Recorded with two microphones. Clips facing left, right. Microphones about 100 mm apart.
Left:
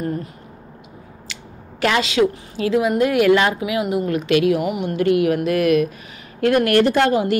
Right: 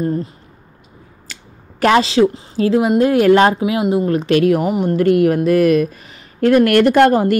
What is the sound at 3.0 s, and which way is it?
A woman's voice, 35° right (ahead or behind).